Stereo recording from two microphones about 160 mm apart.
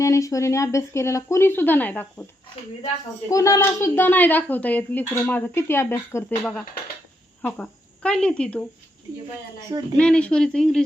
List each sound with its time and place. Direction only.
0.0 s a woman's voice: 20° left (ahead or behind)
3.2 s a woman's voice: 20° left (ahead or behind)
10.0 s speech: 5° left (ahead or behind)